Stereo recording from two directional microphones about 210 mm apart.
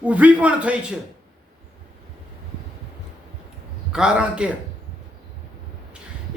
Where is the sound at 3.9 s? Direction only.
5° right (ahead or behind).